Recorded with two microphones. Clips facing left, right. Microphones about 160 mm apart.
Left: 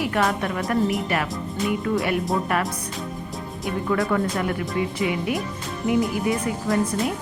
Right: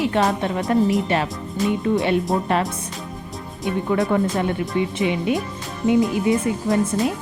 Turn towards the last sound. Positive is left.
turn(degrees=-25)  # may be behind; listen again after turning